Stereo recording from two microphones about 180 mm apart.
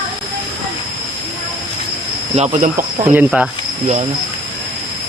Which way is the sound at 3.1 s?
5° right (ahead or behind).